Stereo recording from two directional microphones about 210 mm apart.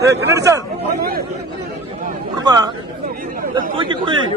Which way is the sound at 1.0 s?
45° right (ahead or behind).